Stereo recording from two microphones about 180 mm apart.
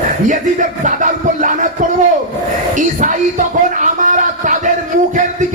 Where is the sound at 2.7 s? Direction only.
45° right (ahead or behind).